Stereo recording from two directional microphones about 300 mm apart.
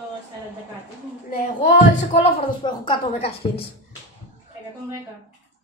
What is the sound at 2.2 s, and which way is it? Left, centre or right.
A woman's voice, centre.